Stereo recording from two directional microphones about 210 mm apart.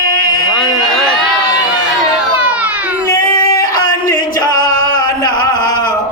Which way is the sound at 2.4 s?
5° right (ahead or behind).